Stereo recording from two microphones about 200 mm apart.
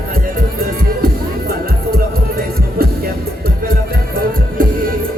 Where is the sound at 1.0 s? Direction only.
50° right (ahead or behind).